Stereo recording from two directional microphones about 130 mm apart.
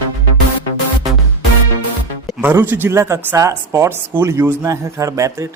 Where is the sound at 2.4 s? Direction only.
15° right (ahead or behind).